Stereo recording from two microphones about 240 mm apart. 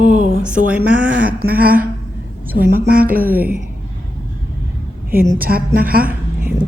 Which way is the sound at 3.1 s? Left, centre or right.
Right.